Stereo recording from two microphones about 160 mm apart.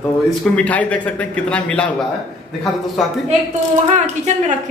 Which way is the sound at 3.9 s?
45° right (ahead or behind).